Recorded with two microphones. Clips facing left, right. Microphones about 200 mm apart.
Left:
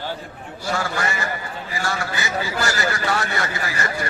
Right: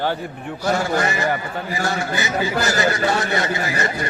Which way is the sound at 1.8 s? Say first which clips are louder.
Right 3 dB; 20° right (ahead or behind).